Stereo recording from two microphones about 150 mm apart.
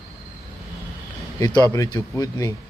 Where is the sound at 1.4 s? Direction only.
25° left (ahead or behind).